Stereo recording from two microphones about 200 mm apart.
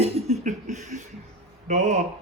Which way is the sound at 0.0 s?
35° right (ahead or behind).